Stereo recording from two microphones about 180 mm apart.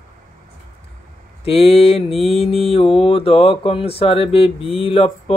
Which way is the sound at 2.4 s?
30° left (ahead or behind).